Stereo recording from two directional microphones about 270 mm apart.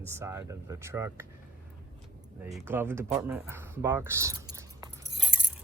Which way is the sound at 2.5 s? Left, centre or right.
Centre.